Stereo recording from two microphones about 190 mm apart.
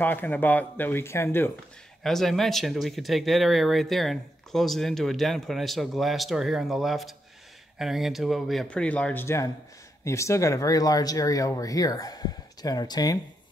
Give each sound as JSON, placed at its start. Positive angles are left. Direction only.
{"t": 0.0, "sound": "speech", "side_deg": 10}
{"t": 2.0, "sound": "speech", "side_deg": 0}